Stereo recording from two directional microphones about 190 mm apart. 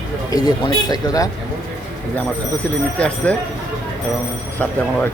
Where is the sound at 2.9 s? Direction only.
5° left (ahead or behind).